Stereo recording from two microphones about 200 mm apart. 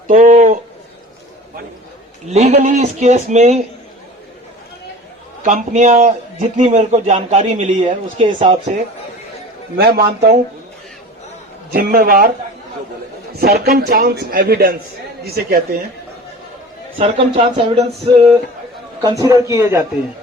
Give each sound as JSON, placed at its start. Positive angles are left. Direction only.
{"t": 0.1, "sound": "a sound", "side_deg": -35}
{"t": 2.3, "sound": "a man's voice", "side_deg": -35}
{"t": 5.4, "sound": "a man's voice", "side_deg": -40}
{"t": 8.2, "sound": "a man's voice", "side_deg": -25}
{"t": 9.7, "sound": "a man's voice", "side_deg": -50}
{"t": 11.7, "sound": "a man's voice", "side_deg": -50}
{"t": 13.4, "sound": "a man's voice", "side_deg": -50}
{"t": 17.0, "sound": "speech", "side_deg": -30}
{"t": 19.0, "sound": "a man's voice", "side_deg": -15}